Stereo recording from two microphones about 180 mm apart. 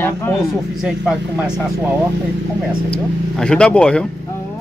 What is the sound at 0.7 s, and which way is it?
Speech, 5° right (ahead or behind).